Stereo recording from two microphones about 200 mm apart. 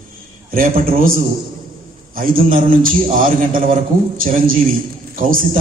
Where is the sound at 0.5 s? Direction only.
45° right (ahead or behind).